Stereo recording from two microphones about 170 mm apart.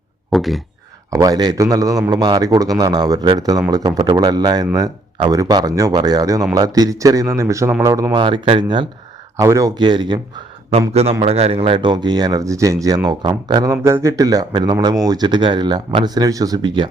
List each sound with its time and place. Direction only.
0.3 s speech: centre (ahead or behind)
1.1 s speech: 20° right (ahead or behind)
9.4 s speech: 20° right (ahead or behind)
10.7 s speech: 40° right (ahead or behind)